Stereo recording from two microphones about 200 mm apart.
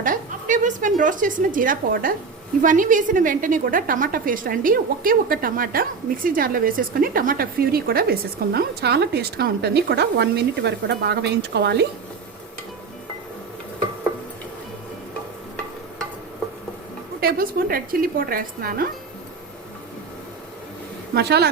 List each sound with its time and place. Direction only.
0.0 s a woman's voice: 40° right (ahead or behind); by 11.9 s 55° right (ahead or behind)
17.2 s a woman's voice: 50° right (ahead or behind)
21.2 s speech: 55° right (ahead or behind)